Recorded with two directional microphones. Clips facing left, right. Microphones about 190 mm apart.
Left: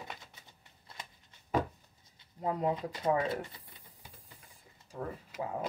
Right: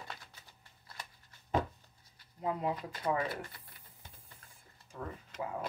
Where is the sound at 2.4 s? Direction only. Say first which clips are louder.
Left 3 dB; 30° left (ahead or behind).